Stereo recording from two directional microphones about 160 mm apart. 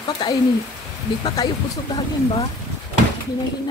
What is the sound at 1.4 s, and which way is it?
Speech, 25° left (ahead or behind).